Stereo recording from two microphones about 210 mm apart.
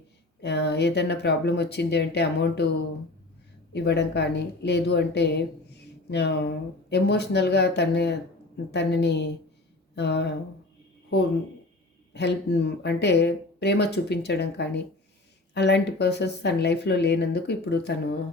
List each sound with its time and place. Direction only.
0.4 s speech: 55° left (ahead or behind)
12.1 s speech: 55° left (ahead or behind)